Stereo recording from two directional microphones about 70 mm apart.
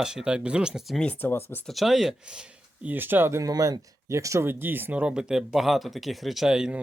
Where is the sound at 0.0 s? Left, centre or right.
Centre.